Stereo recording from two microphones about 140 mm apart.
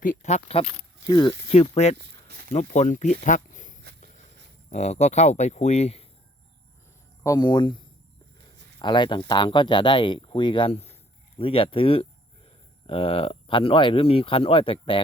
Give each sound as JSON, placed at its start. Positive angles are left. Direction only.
{"t": 0.0, "sound": "speech", "side_deg": 55}
{"t": 1.0, "sound": "speech", "side_deg": 25}
{"t": 1.5, "sound": "speech", "side_deg": 50}
{"t": 2.5, "sound": "a sound", "side_deg": 60}
{"t": 4.7, "sound": "speech", "side_deg": 50}
{"t": 7.2, "sound": "speech", "side_deg": 25}